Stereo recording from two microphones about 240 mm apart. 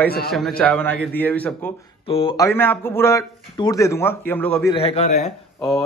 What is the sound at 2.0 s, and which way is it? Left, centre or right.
Speech, left.